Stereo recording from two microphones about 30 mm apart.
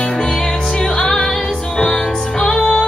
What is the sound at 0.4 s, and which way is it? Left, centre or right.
Music, centre.